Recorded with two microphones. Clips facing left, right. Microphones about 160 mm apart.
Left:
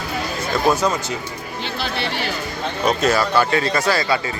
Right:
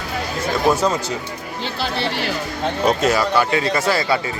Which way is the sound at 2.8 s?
20° right (ahead or behind).